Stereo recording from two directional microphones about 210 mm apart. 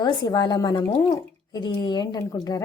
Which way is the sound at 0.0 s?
20° left (ahead or behind).